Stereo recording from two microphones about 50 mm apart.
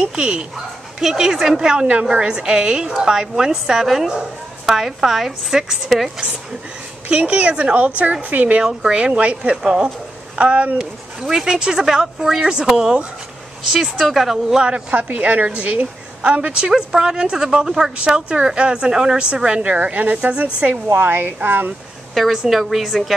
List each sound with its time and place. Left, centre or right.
0.0 s a woman's voice: centre
7.1 s speech: right
8.8 s a woman's voice: centre
11.1 s a woman's voice: centre
14.7 s a woman's voice: right
16.6 s a woman's voice: centre
17.9 s a woman's voice: right
20.6 s a woman's voice: right
22.1 s a woman's voice: centre